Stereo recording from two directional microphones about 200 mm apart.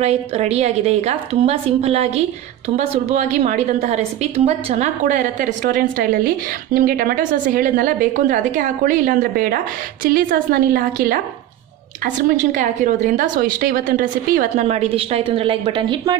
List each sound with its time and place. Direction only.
0.0 s a woman's voice: 30° right (ahead or behind)